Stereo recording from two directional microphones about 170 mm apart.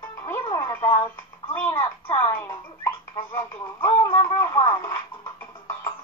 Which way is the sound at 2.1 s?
15° left (ahead or behind).